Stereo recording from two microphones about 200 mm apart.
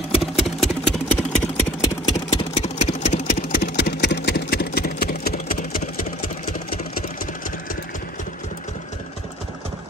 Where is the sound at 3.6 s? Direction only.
55° left (ahead or behind).